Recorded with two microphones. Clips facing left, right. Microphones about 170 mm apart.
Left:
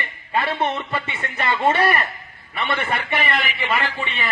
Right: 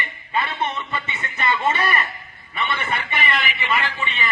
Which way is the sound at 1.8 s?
50° left (ahead or behind).